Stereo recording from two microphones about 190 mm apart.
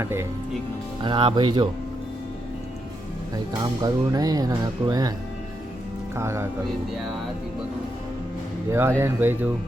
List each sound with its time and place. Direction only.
0.0 s speech: 15° right (ahead or behind)
1.0 s speech: 25° right (ahead or behind)
3.3 s speech: 20° right (ahead or behind)
6.1 s speech: 15° right (ahead or behind)
8.7 s speech: 15° right (ahead or behind)